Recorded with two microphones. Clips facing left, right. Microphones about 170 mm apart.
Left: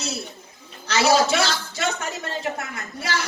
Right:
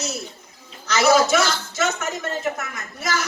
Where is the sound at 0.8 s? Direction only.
30° left (ahead or behind).